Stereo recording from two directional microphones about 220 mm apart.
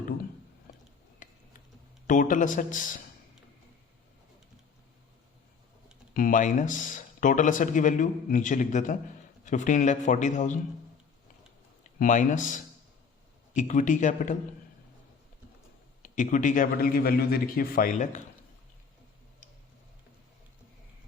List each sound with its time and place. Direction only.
0.7 s a sound: 40° left (ahead or behind)
2.0 s speech: 35° left (ahead or behind)
6.1 s speech: 35° left (ahead or behind)
11.8 s a man's voice: 35° left (ahead or behind)
16.0 s speech: 35° left (ahead or behind)